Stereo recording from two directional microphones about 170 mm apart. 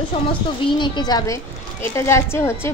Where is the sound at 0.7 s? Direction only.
25° left (ahead or behind).